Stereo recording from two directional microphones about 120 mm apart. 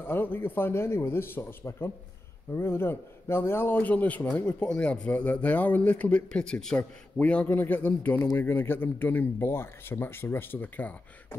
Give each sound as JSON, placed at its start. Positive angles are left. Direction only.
{"t": 0.0, "sound": "a man's voice", "side_deg": 15}